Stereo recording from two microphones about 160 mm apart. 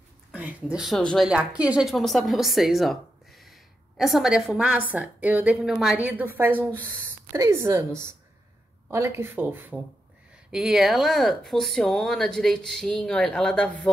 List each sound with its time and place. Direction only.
0.3 s a woman's voice: 10° right (ahead or behind)
10.5 s a woman's voice: centre (ahead or behind)